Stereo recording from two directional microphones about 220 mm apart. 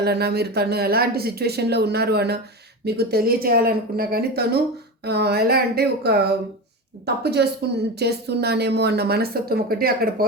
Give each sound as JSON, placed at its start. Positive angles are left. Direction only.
{"t": 0.0, "sound": "speech", "side_deg": -45}